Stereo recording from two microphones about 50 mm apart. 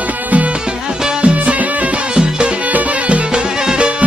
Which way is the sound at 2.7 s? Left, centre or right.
Right.